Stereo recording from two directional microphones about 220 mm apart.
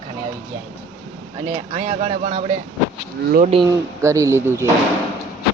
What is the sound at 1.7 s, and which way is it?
Speech, 30° right (ahead or behind).